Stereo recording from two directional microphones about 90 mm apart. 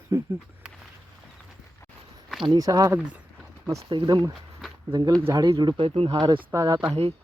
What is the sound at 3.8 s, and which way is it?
Speech, 70° right (ahead or behind).